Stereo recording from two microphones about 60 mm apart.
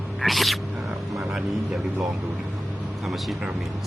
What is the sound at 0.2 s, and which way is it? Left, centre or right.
Speech, centre.